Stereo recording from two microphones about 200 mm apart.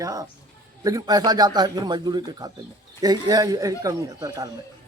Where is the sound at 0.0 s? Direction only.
15° right (ahead or behind).